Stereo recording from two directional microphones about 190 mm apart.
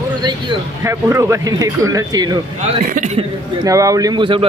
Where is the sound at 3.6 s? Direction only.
15° right (ahead or behind).